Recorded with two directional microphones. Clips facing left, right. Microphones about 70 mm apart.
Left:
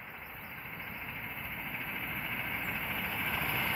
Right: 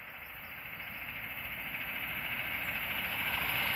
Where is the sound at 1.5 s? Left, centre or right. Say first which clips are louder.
Left 1 dB; centre.